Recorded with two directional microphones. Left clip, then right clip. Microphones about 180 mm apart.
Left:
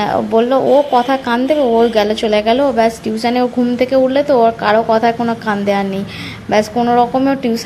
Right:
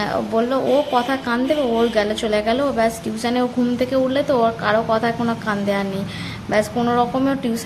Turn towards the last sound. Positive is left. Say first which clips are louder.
# left 6 dB
turn(degrees=15)  # may be behind; listen again after turning